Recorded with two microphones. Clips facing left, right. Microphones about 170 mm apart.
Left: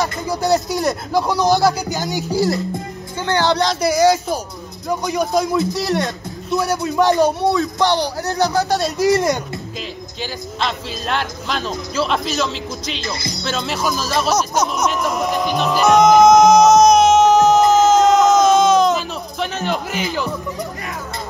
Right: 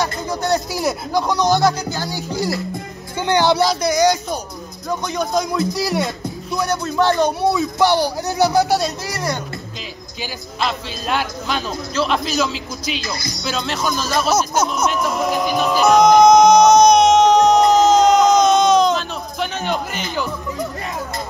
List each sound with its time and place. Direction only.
0.0 s speech: centre (ahead or behind)
1.9 s music: 15° left (ahead or behind)
2.3 s speech: centre (ahead or behind)
3.2 s speech: 15° right (ahead or behind)
3.8 s speech: 5° left (ahead or behind)
7.5 s speech: 10° right (ahead or behind)
9.1 s speech: 20° left (ahead or behind)
10.6 s speech: 5° right (ahead or behind)